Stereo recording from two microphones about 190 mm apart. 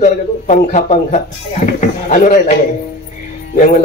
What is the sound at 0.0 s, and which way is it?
A man's voice, 40° left (ahead or behind).